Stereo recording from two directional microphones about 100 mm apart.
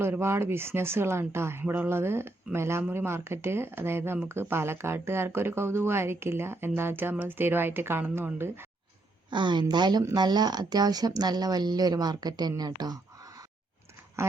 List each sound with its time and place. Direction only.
0.0 s speech: 25° right (ahead or behind)
9.3 s speech: 50° right (ahead or behind)
14.2 s duck: 30° right (ahead or behind)